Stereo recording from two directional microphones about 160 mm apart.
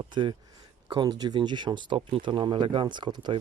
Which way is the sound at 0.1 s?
30° right (ahead or behind).